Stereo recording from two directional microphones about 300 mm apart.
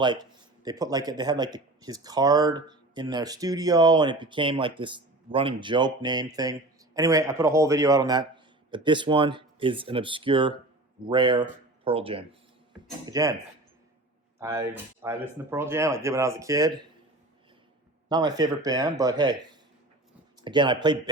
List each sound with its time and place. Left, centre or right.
0.0 s speech: centre
14.3 s speech: centre
18.1 s speech: centre